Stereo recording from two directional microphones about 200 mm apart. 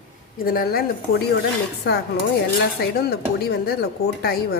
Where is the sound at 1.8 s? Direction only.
55° left (ahead or behind).